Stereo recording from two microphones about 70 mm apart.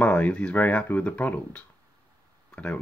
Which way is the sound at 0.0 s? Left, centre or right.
Centre.